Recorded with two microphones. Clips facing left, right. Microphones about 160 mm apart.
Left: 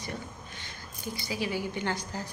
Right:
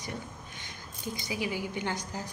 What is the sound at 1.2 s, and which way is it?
A woman's voice, 15° right (ahead or behind).